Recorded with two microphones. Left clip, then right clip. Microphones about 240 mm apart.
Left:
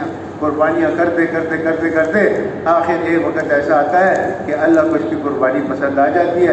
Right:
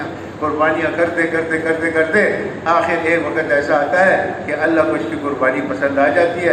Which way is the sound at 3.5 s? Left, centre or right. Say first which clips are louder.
Left 2 dB; right.